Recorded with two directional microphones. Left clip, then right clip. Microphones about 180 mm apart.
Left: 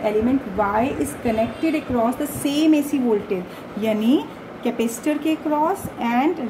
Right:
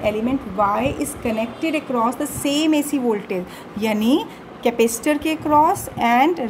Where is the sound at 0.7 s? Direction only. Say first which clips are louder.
Left 1 dB; 60° right (ahead or behind).